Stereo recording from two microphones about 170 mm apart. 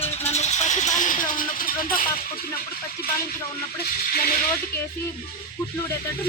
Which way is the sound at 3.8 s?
65° left (ahead or behind).